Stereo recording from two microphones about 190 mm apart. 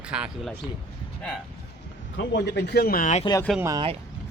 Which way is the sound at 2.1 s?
65° left (ahead or behind).